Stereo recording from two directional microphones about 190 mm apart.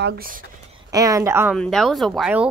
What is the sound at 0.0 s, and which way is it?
Speech, 55° right (ahead or behind).